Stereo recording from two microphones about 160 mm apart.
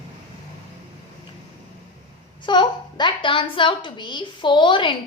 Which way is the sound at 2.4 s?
30° left (ahead or behind).